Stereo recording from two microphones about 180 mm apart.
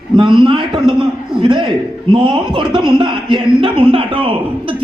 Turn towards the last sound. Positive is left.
turn(degrees=-30)  # may be behind; listen again after turning